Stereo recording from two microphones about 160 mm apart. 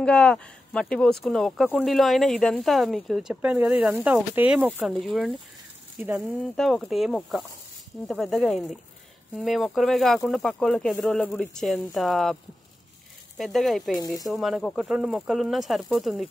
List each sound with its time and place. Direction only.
0.0 s speech: 5° left (ahead or behind); by 4.7 s 10° right (ahead or behind)
4.7 s speech: centre (ahead or behind)
13.4 s speech: centre (ahead or behind)
13.9 s speech: 20° left (ahead or behind)
14.3 s speech: centre (ahead or behind)